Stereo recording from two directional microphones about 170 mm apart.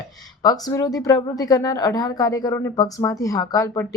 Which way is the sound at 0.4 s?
20° left (ahead or behind).